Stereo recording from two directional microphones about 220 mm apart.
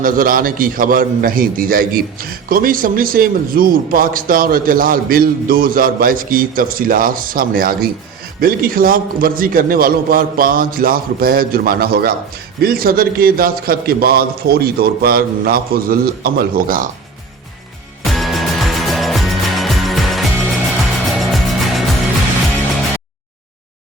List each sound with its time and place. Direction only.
0.0 s a man's voice: 40° right (ahead or behind)
18.0 s music: centre (ahead or behind)